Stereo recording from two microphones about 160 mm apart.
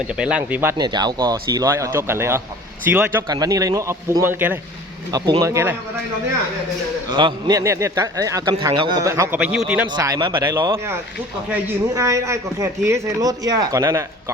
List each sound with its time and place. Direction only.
0.1 s speech: 5° right (ahead or behind)
0.8 s a man's voice: 25° right (ahead or behind)
3.2 s a man's voice: 25° right (ahead or behind)
5.1 s a man's voice: 25° right (ahead or behind)
7.1 s a man's voice: 30° right (ahead or behind)
9.4 s speech: 10° right (ahead or behind)
9.9 s a man's voice: 25° right (ahead or behind)
11.9 s a man's voice: 20° right (ahead or behind)